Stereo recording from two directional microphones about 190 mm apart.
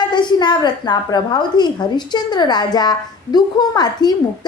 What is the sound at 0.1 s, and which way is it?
A woman's voice, 25° left (ahead or behind).